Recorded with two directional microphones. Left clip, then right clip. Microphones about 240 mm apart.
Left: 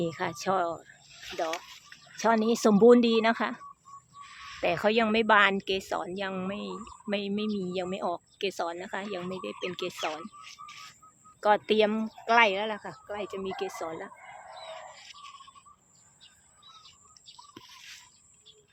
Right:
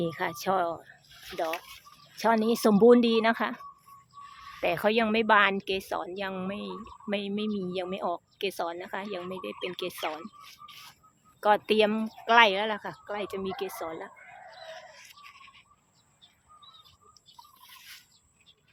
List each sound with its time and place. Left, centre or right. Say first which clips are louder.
0.0 s speech: right 1 dB; centre
4.6 s speech: even; centre
14.6 s chicken: left 1 dB; centre